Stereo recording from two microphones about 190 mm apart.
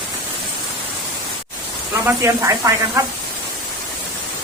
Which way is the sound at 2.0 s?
15° right (ahead or behind).